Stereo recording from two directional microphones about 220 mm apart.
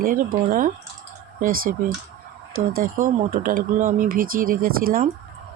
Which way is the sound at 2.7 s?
40° right (ahead or behind).